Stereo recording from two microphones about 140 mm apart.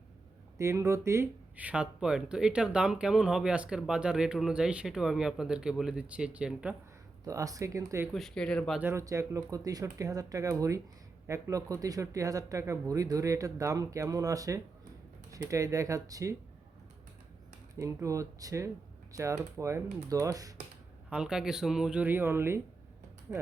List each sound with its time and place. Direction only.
0.6 s speech: 20° right (ahead or behind)
7.3 s speech: 25° right (ahead or behind)
8.1 s speech: 5° left (ahead or behind)
8.8 s speech: 20° right (ahead or behind)
17.7 s speech: 20° right (ahead or behind)
21.1 s speech: 5° right (ahead or behind)